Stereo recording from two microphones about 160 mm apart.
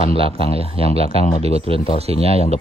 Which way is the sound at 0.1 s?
35° right (ahead or behind).